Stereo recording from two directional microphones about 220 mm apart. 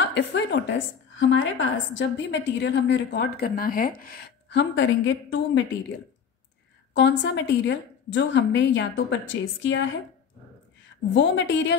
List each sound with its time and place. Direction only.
0.1 s a woman's voice: 55° left (ahead or behind)
6.9 s a woman's voice: 55° left (ahead or behind)
11.1 s a woman's voice: 55° left (ahead or behind)